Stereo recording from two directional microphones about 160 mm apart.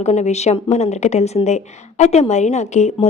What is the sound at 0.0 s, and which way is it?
A woman's voice, 45° left (ahead or behind).